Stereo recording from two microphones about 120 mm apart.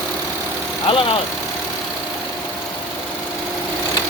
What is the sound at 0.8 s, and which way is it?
Speech, 50° left (ahead or behind).